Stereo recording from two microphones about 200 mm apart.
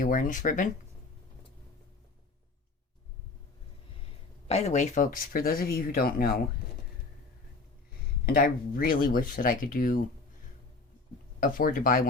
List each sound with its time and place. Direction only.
0.0 s speech: 45° left (ahead or behind)
4.4 s speech: 30° left (ahead or behind); by 6.4 s 50° left (ahead or behind)
8.3 s speech: 45° left (ahead or behind)
11.3 s speech: 45° left (ahead or behind)